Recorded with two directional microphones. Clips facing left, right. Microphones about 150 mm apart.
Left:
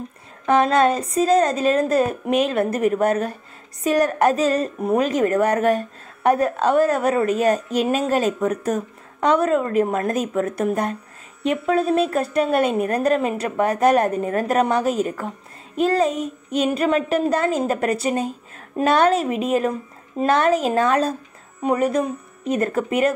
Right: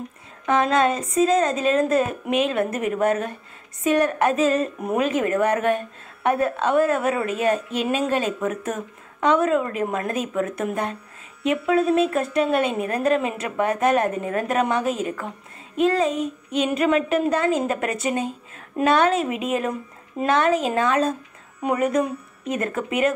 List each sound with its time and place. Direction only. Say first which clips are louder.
0.5 s a woman's voice: left 3 dB; 35° left (ahead or behind)